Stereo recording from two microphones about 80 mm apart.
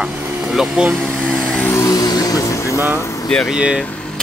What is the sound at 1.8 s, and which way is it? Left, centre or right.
Music, left.